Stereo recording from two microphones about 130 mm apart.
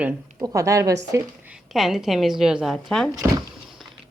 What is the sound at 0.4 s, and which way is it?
Speech, 25° right (ahead or behind).